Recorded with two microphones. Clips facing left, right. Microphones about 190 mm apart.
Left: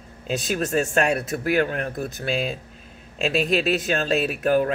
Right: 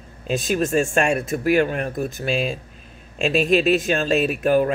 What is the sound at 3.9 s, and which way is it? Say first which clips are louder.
Speech: right 3 dB; 15° right (ahead or behind).